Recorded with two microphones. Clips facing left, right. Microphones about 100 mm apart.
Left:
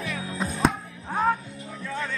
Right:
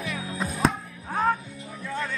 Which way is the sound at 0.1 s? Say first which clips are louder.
Left 1 dB; centre (ahead or behind).